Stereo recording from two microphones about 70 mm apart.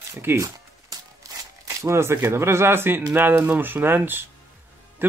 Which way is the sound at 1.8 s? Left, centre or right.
Right.